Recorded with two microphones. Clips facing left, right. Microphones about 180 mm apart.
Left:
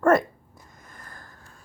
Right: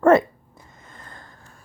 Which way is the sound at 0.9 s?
25° right (ahead or behind).